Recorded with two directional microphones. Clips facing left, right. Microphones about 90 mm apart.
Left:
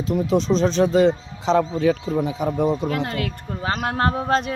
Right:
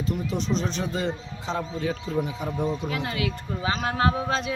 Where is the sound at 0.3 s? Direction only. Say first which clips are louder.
Left 11 dB; 90° left.